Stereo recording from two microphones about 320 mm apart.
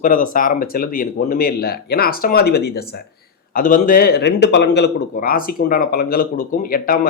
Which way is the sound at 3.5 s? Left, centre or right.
Left.